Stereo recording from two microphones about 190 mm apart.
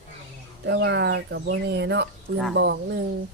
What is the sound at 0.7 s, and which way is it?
Speech, 65° right (ahead or behind).